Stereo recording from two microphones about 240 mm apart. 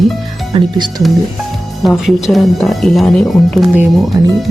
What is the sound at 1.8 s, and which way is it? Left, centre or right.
Speech, centre.